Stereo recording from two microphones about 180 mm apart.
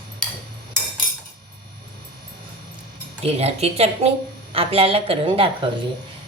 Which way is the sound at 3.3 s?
35° right (ahead or behind).